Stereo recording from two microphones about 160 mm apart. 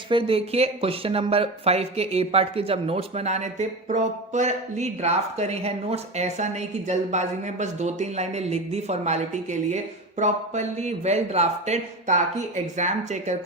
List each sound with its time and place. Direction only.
0.1 s speech: 35° right (ahead or behind)